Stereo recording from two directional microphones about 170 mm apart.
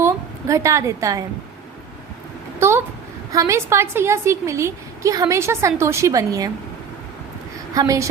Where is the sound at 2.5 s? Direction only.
15° right (ahead or behind).